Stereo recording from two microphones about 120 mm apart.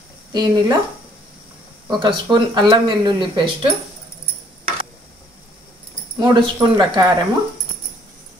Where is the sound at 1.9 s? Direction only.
40° right (ahead or behind).